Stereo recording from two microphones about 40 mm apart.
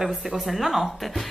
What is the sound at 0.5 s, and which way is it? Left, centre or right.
Speech, centre.